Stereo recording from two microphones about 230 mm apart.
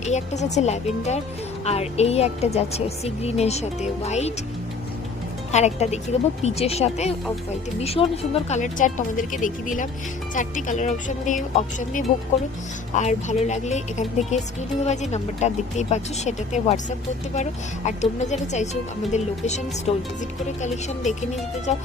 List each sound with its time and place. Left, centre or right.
0.0 s speech: left
5.5 s speech: left